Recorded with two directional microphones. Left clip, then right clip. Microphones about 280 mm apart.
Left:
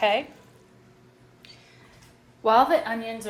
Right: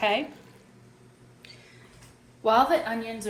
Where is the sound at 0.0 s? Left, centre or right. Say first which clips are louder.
Left 3 dB; left.